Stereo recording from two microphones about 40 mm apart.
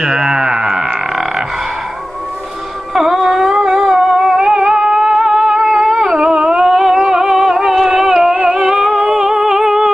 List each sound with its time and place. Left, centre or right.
0.0 s frog: centre
2.9 s a sound: centre
3.6 s music: centre
5.6 s a sound: centre
5.9 s humming: centre
7.1 s music: centre
9.1 s humming: centre